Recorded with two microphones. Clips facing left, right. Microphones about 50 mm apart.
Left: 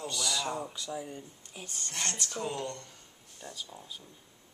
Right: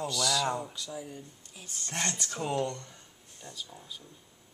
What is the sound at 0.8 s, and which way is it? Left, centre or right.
Speech, centre.